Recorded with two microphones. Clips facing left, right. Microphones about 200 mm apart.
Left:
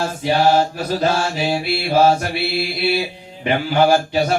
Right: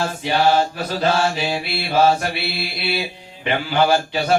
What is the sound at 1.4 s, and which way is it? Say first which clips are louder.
Speech: left 4 dB; 45° left (ahead or behind).